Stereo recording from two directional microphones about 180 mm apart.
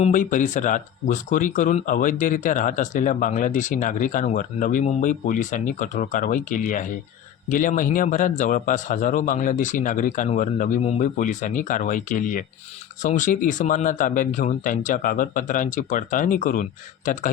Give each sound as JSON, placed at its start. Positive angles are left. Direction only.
{"t": 0.0, "sound": "speech", "side_deg": 45}